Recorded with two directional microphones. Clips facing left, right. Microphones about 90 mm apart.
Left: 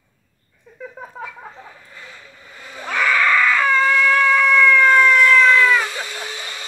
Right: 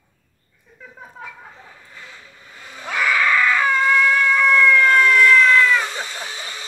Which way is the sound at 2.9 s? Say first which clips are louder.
Left 1 dB; 10° right (ahead or behind).